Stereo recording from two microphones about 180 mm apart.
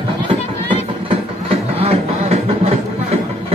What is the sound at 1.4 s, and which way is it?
Music, 35° right (ahead or behind).